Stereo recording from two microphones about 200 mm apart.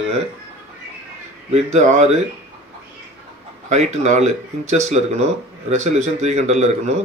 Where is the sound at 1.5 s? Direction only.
35° right (ahead or behind).